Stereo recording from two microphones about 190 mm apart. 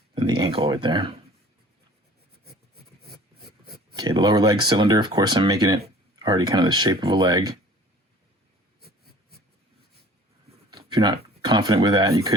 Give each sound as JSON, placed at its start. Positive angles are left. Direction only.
{"t": 0.1, "sound": "speech", "side_deg": -25}
{"t": 3.9, "sound": "speech", "side_deg": -20}
{"t": 8.8, "sound": "a sound", "side_deg": -55}
{"t": 10.7, "sound": "speech", "side_deg": -25}